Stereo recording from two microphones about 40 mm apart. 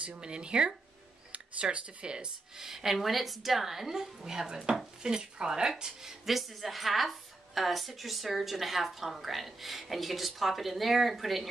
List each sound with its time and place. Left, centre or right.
0.2 s speech: right
2.1 s a woman's voice: centre